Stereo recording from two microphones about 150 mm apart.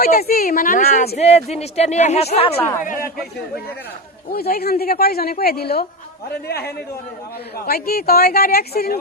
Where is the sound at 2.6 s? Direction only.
15° left (ahead or behind).